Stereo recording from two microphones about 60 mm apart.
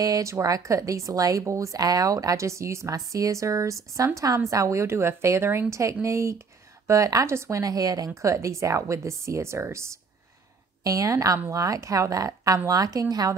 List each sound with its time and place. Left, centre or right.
0.0 s a woman's voice: right
1.4 s a woman's voice: right
2.9 s a woman's voice: right
6.9 s a woman's voice: right
7.6 s a woman's voice: right
10.8 s a woman's voice: right